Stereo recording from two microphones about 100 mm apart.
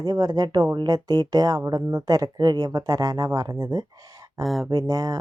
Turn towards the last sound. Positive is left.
turn(degrees=-40)  # may be behind; listen again after turning